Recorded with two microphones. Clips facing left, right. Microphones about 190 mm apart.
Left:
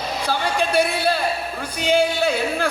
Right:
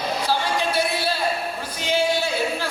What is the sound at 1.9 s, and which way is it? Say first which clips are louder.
Speech: left 3 dB; 55° left (ahead or behind).